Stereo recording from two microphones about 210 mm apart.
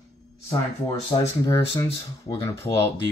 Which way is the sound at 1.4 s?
15° left (ahead or behind).